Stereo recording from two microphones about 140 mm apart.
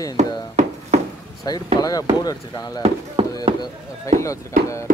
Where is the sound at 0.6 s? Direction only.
55° right (ahead or behind).